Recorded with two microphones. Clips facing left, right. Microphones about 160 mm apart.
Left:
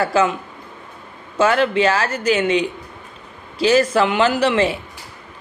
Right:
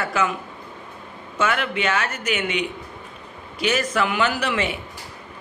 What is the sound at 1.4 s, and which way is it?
A man's voice, 30° left (ahead or behind).